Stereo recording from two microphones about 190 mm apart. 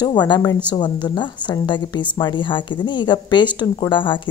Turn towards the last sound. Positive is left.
turn(degrees=25)  # may be behind; listen again after turning